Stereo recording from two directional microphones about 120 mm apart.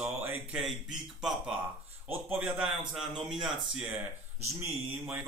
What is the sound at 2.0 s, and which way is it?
A man's voice, 15° right (ahead or behind).